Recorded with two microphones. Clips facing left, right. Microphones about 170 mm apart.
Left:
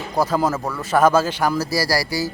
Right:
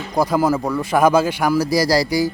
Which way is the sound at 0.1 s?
10° right (ahead or behind).